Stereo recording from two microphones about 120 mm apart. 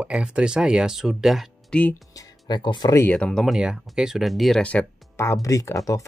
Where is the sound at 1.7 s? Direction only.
10° left (ahead or behind).